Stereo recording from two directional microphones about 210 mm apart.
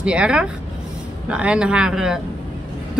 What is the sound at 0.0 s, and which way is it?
A woman's voice, 5° right (ahead or behind).